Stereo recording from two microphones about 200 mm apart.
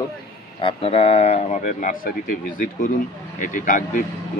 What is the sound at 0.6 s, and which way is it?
A man's voice, 25° left (ahead or behind).